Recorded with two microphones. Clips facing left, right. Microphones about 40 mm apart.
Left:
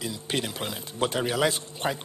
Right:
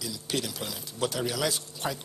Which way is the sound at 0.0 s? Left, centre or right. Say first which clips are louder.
Left 2 dB; left.